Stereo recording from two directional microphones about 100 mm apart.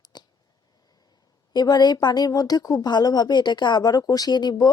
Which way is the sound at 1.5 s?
45° left (ahead or behind).